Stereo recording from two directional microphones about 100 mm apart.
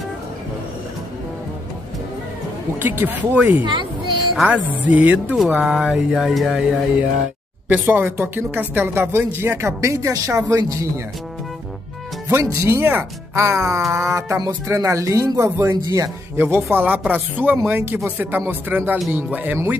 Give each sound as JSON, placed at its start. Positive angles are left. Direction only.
{"t": 2.8, "sound": "speech", "side_deg": -20}
{"t": 4.4, "sound": "speech", "side_deg": -15}
{"t": 9.8, "sound": "speech", "side_deg": -35}
{"t": 12.3, "sound": "speech", "side_deg": -25}
{"t": 16.3, "sound": "speech", "side_deg": -20}